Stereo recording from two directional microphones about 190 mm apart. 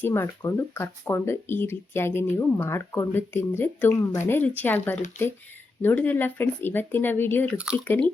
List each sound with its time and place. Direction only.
0.0 s speech: 15° left (ahead or behind)
5.2 s speech: 40° left (ahead or behind)
5.8 s speech: 10° left (ahead or behind)